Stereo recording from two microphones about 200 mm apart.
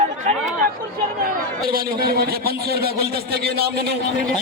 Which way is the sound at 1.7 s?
50° right (ahead or behind).